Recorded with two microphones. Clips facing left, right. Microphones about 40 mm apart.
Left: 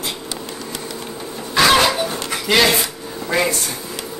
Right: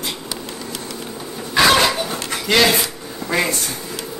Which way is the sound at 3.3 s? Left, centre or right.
Centre.